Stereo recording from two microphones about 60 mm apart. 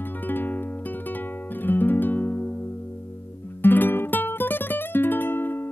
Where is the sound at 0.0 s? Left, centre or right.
Left.